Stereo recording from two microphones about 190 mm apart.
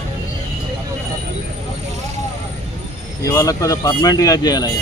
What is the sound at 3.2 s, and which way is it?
Speech, 20° left (ahead or behind).